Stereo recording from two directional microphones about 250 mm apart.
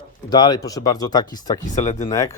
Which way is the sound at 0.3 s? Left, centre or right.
Centre.